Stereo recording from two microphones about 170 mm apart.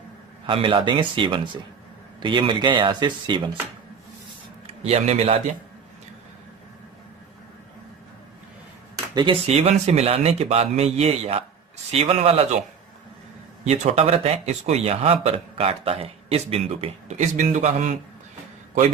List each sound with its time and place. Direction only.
0.4 s speech: 30° right (ahead or behind)
4.6 s a man's voice: 40° right (ahead or behind)
9.1 s speech: 30° right (ahead or behind)
13.7 s speech: 40° right (ahead or behind)